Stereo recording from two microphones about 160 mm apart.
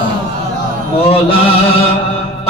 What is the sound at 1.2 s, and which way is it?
Music, 35° left (ahead or behind).